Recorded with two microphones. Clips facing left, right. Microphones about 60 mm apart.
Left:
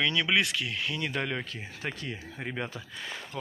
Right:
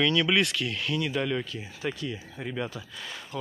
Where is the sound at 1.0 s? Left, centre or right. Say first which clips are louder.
Right 5 dB; left.